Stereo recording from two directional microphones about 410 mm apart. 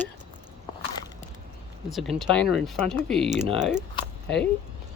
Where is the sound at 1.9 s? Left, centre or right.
Centre.